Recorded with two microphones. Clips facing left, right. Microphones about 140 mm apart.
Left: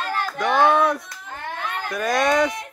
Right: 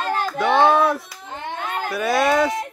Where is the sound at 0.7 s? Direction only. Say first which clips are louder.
Right 1 dB; 5° right (ahead or behind).